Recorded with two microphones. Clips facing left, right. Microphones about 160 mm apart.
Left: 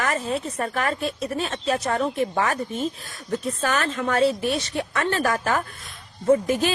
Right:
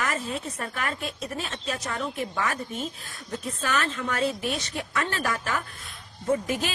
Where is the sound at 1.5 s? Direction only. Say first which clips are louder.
Left 8 dB; 50° left (ahead or behind).